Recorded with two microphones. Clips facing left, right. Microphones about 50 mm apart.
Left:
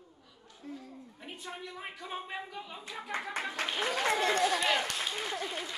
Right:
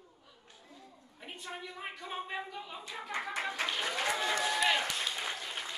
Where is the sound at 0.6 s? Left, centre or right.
Left.